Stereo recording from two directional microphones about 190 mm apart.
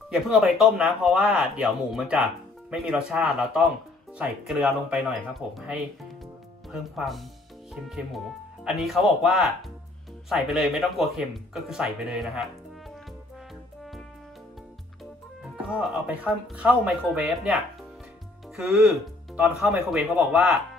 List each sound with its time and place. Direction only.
0.1 s speech: centre (ahead or behind)
15.5 s speech: 5° right (ahead or behind)
18.6 s speech: 5° right (ahead or behind)